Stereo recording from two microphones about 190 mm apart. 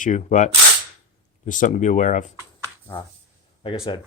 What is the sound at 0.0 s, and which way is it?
Speech, 40° left (ahead or behind).